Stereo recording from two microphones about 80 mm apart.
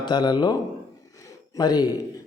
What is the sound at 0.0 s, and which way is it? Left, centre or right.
Speech, left.